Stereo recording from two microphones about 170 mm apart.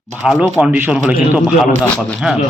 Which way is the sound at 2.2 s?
5° right (ahead or behind).